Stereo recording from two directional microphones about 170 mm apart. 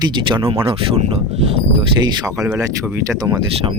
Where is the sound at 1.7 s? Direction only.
30° right (ahead or behind).